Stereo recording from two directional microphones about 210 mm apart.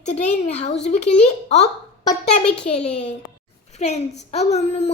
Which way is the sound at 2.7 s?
30° left (ahead or behind).